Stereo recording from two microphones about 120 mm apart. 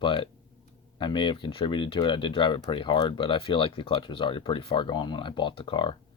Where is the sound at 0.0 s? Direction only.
45° left (ahead or behind).